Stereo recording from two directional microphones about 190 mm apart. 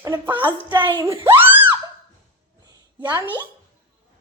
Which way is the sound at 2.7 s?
10° right (ahead or behind).